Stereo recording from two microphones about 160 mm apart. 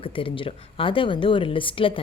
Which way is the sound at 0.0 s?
35° left (ahead or behind).